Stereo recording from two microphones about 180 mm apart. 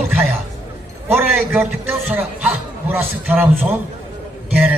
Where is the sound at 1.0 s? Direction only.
5° right (ahead or behind).